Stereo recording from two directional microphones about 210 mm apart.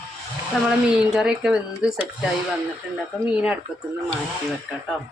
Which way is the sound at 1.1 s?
5° right (ahead or behind).